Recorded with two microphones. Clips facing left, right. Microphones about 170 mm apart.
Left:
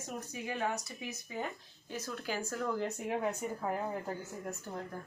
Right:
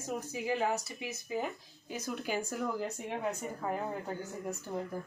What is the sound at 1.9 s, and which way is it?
Speech, 15° right (ahead or behind).